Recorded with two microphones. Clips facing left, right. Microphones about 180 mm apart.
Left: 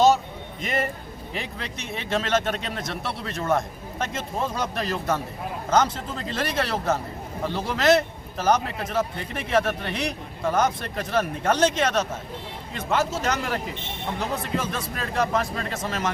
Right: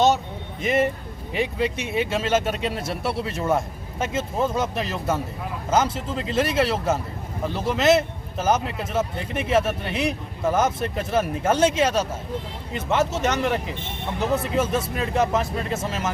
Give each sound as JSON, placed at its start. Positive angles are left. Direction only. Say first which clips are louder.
{"t": 0.6, "sound": "a man's voice", "louder": "right 6 dB", "side_deg": -5}
{"t": 6.3, "sound": "a man's voice", "louder": "right 5 dB", "side_deg": -5}